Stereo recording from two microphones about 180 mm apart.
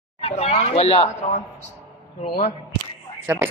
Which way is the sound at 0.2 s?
35° left (ahead or behind).